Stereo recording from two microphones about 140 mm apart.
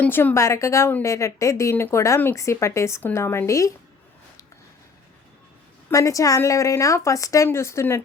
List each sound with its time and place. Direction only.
0.0 s a woman's voice: 15° left (ahead or behind)
5.9 s a woman's voice: 20° left (ahead or behind)